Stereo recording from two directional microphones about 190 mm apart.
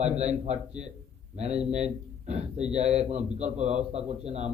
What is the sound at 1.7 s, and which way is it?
A man's voice, 35° right (ahead or behind).